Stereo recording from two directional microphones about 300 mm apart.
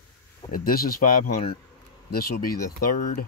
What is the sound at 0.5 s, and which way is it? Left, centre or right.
A man's voice, left.